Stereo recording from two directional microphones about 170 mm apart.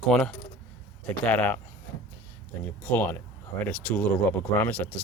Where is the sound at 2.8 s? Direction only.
10° left (ahead or behind).